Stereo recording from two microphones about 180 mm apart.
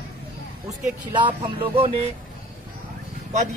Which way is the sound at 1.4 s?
30° right (ahead or behind).